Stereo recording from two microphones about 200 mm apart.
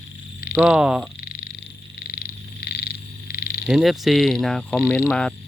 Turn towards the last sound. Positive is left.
turn(degrees=5)  # may be behind; listen again after turning